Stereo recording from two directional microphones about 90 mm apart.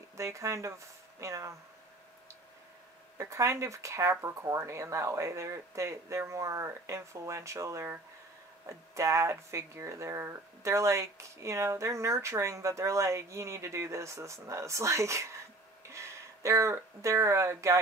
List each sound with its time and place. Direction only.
0.2 s speech: 35° right (ahead or behind)
3.2 s speech: 35° right (ahead or behind)